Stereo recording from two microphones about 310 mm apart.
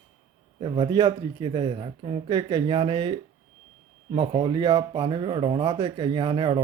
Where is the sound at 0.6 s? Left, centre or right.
Centre.